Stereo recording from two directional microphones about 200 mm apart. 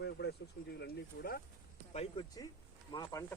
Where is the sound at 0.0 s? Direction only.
55° left (ahead or behind).